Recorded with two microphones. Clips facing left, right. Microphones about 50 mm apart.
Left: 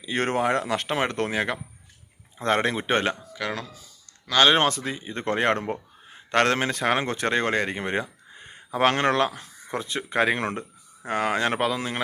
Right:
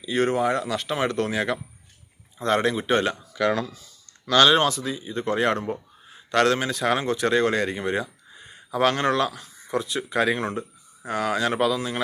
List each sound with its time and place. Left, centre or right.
0.2 s speech: left
3.3 s speech: centre
4.4 s speech: left